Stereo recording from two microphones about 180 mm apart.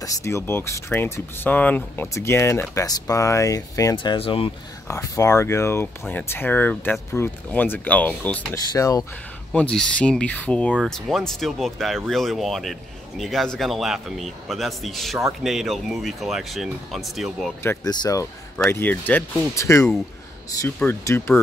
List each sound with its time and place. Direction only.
0.0 s speech: 15° left (ahead or behind)
4.8 s speech: 15° left (ahead or behind)
8.7 s speech: 20° left (ahead or behind)
9.5 s a man's voice: 5° left (ahead or behind)
17.8 s speech: 20° left (ahead or behind)